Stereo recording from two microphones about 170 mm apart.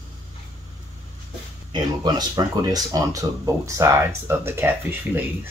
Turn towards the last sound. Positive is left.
turn(degrees=-10)  # may be behind; listen again after turning